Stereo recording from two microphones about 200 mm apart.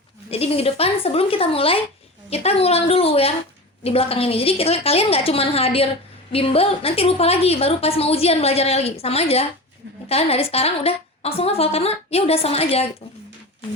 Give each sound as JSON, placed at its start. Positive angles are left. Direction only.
{"t": 0.3, "sound": "a woman's voice", "side_deg": 30}